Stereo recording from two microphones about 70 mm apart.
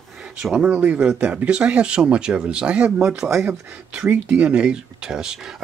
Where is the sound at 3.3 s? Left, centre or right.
Right.